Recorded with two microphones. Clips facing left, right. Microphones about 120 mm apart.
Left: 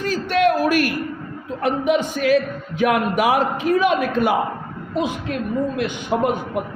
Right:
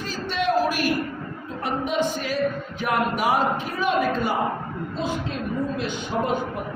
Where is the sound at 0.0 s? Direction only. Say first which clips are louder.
Left 8 dB; 60° left (ahead or behind).